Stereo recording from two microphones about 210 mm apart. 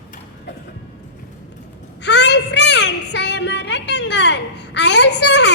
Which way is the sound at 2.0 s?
55° left (ahead or behind).